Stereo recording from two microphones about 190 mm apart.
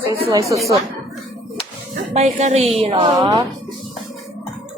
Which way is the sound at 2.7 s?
25° right (ahead or behind).